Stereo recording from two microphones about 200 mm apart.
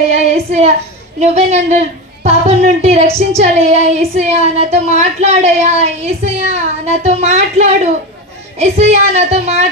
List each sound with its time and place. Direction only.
0.1 s child singing: 35° right (ahead or behind)
1.3 s speech: 35° right (ahead or behind)